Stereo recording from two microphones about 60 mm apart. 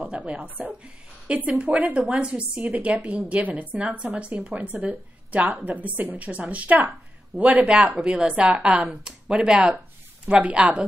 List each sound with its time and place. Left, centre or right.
0.0 s speech: right